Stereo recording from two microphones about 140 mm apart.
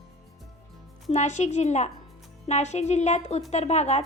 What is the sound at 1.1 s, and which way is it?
A woman's voice, 55° left (ahead or behind).